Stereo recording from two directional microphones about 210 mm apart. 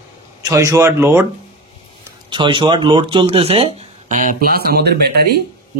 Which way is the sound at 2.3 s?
20° right (ahead or behind).